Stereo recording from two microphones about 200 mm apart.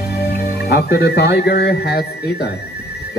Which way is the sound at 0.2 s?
50° left (ahead or behind).